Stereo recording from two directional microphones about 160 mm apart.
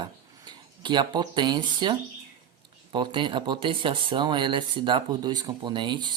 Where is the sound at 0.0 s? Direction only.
25° right (ahead or behind).